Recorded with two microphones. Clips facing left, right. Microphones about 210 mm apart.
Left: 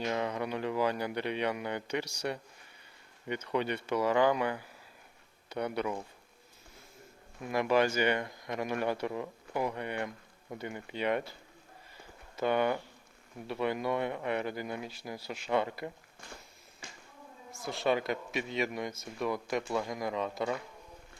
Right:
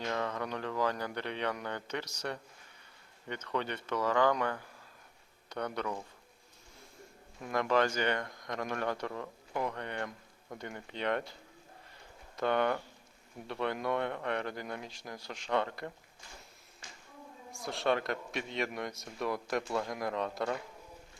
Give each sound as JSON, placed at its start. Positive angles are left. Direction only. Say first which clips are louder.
{"t": 0.0, "sound": "speech", "louder": "left 2 dB", "side_deg": 15}
{"t": 7.4, "sound": "speech", "louder": "left 2 dB", "side_deg": 10}
{"t": 12.4, "sound": "speech", "louder": "left 1 dB", "side_deg": 5}
{"t": 16.8, "sound": "a sound", "louder": "left 4 dB", "side_deg": 55}
{"t": 17.5, "sound": "speech", "louder": "left 1 dB", "side_deg": 0}